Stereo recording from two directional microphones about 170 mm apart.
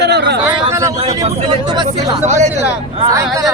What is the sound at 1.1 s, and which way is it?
Speech, 25° right (ahead or behind).